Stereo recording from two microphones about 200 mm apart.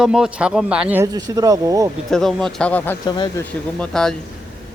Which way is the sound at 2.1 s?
Centre (ahead or behind).